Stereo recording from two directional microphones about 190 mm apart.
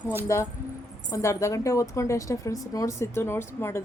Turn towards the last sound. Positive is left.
turn(degrees=15)  # may be behind; listen again after turning